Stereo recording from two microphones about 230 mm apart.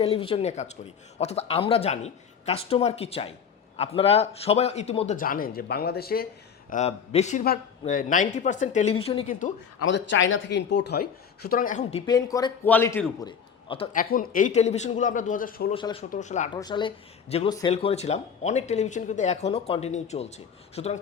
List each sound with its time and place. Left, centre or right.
0.0 s speech: left
6.7 s speech: left
9.9 s speech: left; by 13.3 s centre
13.9 s speech: left
15.7 s speech: left
16.6 s speech: centre